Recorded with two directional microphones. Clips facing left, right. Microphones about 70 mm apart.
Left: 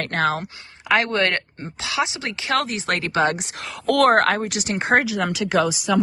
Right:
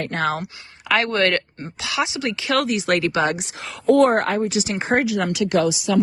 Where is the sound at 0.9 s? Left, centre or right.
Left.